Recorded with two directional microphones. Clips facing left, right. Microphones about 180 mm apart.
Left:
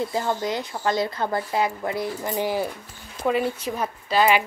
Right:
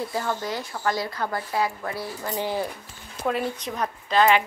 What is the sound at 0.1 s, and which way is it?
Speech, 20° left (ahead or behind).